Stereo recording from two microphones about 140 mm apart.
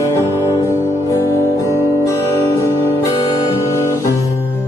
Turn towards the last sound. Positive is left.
turn(degrees=20)  # may be behind; listen again after turning